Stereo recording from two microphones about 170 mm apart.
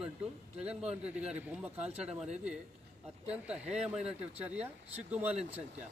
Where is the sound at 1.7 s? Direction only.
40° right (ahead or behind).